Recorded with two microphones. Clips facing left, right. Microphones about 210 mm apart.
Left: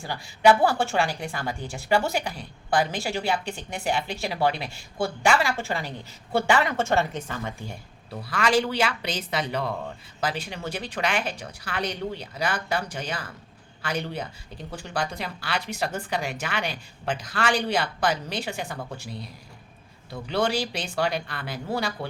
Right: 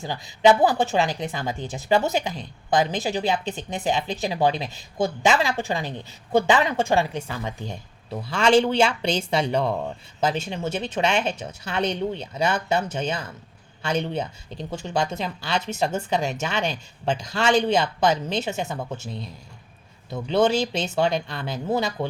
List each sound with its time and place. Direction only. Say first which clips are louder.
0.0 s speech: right 2 dB; 20° right (ahead or behind)